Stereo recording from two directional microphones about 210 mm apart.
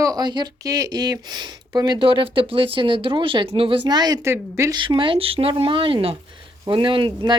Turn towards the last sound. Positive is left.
turn(degrees=-20)  # may be behind; listen again after turning